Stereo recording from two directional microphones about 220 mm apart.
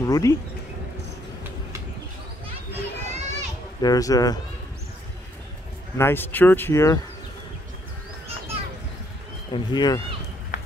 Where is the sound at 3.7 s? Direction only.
15° left (ahead or behind).